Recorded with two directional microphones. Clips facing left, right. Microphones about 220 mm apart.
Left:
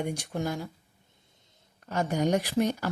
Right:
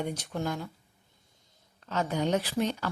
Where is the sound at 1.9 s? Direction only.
10° left (ahead or behind).